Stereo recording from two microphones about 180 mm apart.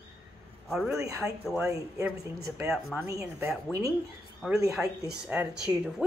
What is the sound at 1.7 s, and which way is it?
Speech, 15° right (ahead or behind).